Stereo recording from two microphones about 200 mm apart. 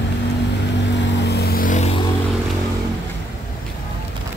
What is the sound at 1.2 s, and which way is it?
Vehicle, 55° left (ahead or behind).